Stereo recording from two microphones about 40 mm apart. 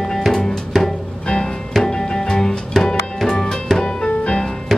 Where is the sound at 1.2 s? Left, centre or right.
Centre.